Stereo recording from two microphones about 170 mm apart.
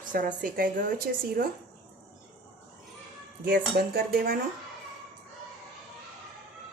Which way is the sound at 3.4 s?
65° right (ahead or behind).